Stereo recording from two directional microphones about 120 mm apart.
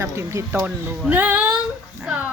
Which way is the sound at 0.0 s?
25° right (ahead or behind).